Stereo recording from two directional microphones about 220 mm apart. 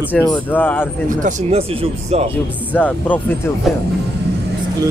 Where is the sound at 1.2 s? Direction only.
25° right (ahead or behind).